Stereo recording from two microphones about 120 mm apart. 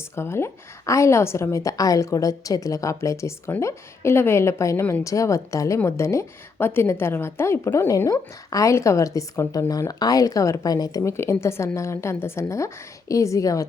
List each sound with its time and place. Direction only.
0.2 s a woman's voice: 20° left (ahead or behind)